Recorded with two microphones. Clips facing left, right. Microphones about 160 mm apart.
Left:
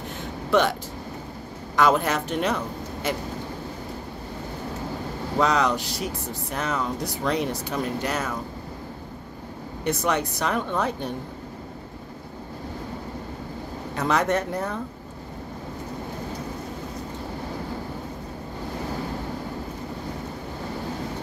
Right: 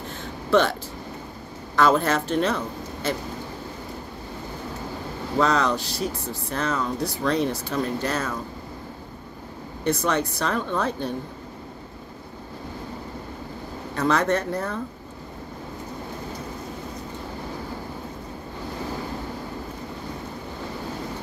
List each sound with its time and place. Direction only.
0.5 s speech: 15° left (ahead or behind)
1.8 s speech: 15° left (ahead or behind)
5.4 s speech: 15° left (ahead or behind)
9.8 s speech: 15° left (ahead or behind)
13.9 s speech: 20° left (ahead or behind)